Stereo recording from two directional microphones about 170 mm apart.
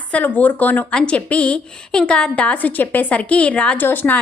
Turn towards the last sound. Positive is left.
turn(degrees=10)  # may be behind; listen again after turning